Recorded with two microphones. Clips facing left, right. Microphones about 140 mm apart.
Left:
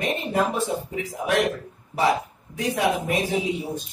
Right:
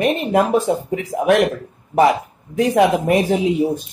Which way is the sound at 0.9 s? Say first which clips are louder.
Right 11 dB; 90° right.